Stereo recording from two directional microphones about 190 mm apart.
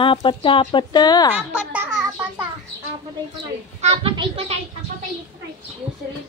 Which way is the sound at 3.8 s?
30° right (ahead or behind).